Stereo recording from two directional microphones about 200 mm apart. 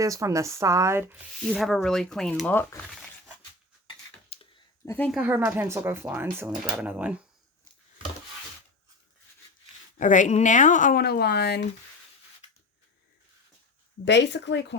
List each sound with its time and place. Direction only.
0.0 s speech: 15° right (ahead or behind)
1.5 s speech: centre (ahead or behind)
4.3 s a sound: 30° left (ahead or behind)
4.9 s speech: 10° left (ahead or behind)
5.1 s speech: 10° right (ahead or behind)
10.0 s speech: 40° left (ahead or behind); by 11.6 s 55° left (ahead or behind)
14.0 s speech: 60° left (ahead or behind)